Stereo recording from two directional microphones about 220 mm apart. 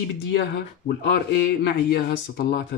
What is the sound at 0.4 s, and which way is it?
Speech, 45° left (ahead or behind).